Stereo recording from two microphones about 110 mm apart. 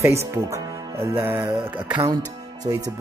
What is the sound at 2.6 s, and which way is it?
Speech, 35° right (ahead or behind).